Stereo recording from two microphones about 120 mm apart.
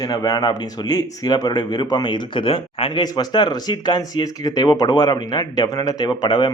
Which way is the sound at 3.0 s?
35° left (ahead or behind).